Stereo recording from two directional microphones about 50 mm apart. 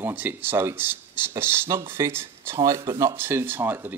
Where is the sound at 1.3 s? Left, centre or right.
Right.